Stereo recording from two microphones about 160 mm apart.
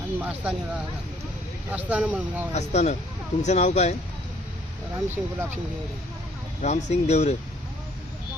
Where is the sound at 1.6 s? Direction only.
10° right (ahead or behind).